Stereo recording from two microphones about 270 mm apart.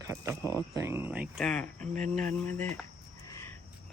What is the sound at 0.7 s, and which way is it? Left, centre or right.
Speech, centre.